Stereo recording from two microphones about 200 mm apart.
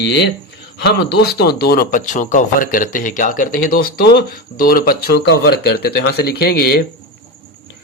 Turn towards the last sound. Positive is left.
turn(degrees=50)  # may be behind; listen again after turning